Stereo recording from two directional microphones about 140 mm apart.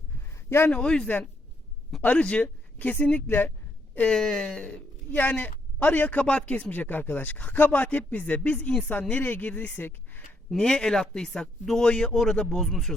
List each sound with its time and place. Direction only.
0.5 s speech: 10° left (ahead or behind)